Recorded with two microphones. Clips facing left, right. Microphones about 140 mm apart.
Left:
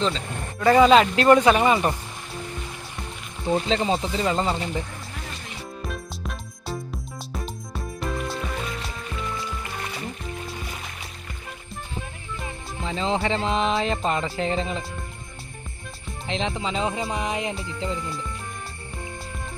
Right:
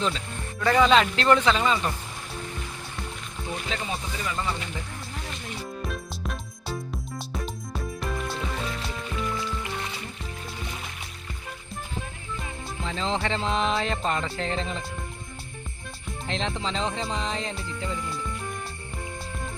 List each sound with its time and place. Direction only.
0.8 s music: 5° left (ahead or behind)
1.5 s speech: 15° left (ahead or behind)
3.5 s speech: 30° left (ahead or behind)
5.9 s music: centre (ahead or behind)
12.8 s music: 5° left (ahead or behind)
16.0 s music: centre (ahead or behind)
17.6 s speech: 20° left (ahead or behind)